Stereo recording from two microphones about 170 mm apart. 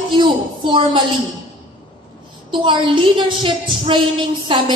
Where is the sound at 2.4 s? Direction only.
30° right (ahead or behind).